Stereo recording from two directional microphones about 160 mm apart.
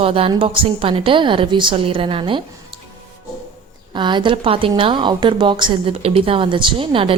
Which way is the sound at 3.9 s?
30° right (ahead or behind).